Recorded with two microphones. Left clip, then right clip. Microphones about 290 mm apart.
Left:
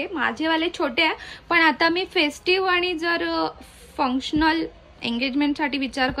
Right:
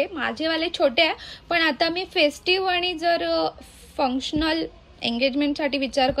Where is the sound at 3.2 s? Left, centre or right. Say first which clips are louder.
Right 1 dB; centre.